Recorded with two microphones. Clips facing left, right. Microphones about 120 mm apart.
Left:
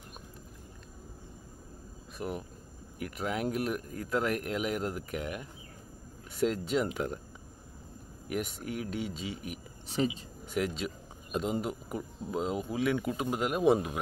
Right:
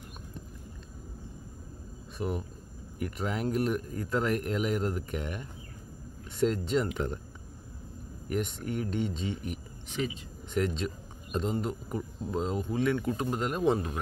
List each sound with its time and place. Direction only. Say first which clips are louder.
2.1 s speech: right 3 dB; centre (ahead or behind)
8.3 s speech: right 2 dB; 5° left (ahead or behind)
10.0 s speech: left 3 dB; 30° left (ahead or behind)
10.5 s speech: right 2 dB; 5° left (ahead or behind)